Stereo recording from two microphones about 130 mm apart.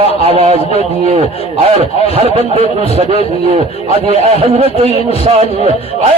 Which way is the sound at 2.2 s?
45° right (ahead or behind).